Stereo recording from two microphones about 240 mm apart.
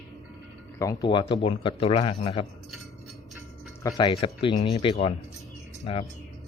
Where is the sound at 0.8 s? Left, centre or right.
Centre.